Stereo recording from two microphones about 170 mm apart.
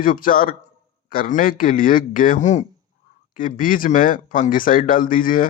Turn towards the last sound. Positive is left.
turn(degrees=55)  # may be behind; listen again after turning